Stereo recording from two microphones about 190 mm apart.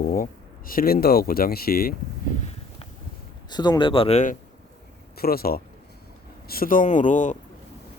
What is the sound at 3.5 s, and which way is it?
Speech, 20° left (ahead or behind).